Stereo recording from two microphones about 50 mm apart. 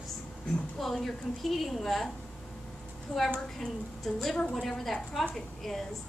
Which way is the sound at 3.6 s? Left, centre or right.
Centre.